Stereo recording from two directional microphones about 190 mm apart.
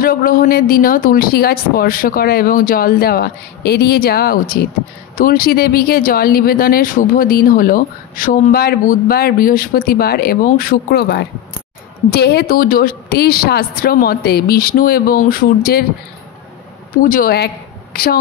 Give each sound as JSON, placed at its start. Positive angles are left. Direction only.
{"t": 0.0, "sound": "speech", "side_deg": 50}
{"t": 17.0, "sound": "a woman's voice", "side_deg": 45}